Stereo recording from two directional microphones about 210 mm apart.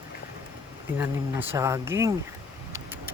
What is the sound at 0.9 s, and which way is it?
Speech, 10° right (ahead or behind).